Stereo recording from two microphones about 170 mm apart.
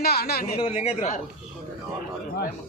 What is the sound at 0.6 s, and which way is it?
Speech, 35° left (ahead or behind).